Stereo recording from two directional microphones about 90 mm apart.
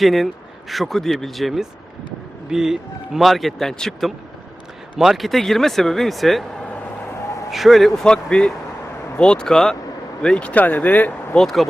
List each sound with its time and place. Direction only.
0.0 s speech: centre (ahead or behind); by 11.3 s 20° left (ahead or behind)
11.3 s speech: centre (ahead or behind)